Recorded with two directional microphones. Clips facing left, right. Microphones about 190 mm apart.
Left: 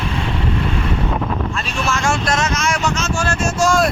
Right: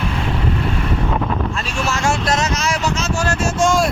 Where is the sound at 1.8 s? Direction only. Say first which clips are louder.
Even; 35° right (ahead or behind).